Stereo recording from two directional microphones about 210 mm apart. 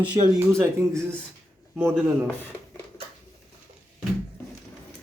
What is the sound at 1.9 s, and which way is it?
Speech, 5° left (ahead or behind).